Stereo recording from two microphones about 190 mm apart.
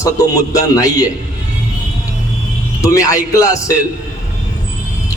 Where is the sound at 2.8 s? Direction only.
15° left (ahead or behind).